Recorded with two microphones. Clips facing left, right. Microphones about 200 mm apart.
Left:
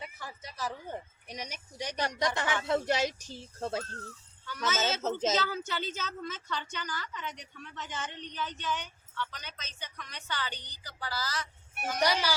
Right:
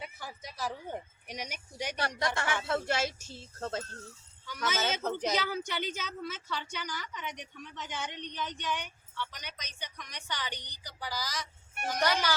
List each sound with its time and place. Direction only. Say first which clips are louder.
0.0 s speech: even; 10° right (ahead or behind)
2.0 s speech: left 3 dB; 15° left (ahead or behind)
4.4 s a woman's voice: left 1 dB; 15° right (ahead or behind)
11.9 s speech: left 1 dB; 10° left (ahead or behind)